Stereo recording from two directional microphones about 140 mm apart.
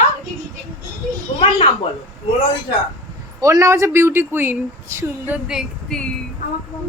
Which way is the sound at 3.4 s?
25° right (ahead or behind).